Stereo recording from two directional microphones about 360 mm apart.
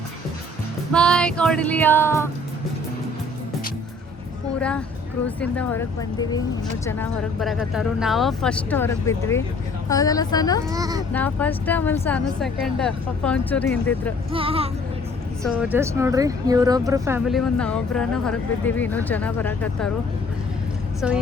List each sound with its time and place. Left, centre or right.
0.9 s speech: centre
5.2 s a woman's voice: centre
10.7 s speech: centre
11.1 s speech: centre
14.3 s speech: centre
15.4 s speech: centre
21.0 s speech: centre